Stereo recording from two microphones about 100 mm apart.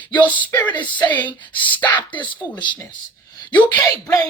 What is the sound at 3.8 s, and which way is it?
Speech, 35° left (ahead or behind).